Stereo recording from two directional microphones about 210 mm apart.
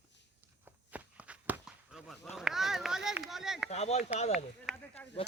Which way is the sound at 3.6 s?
30° left (ahead or behind).